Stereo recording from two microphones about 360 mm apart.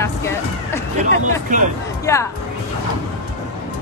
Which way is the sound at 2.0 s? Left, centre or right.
Centre.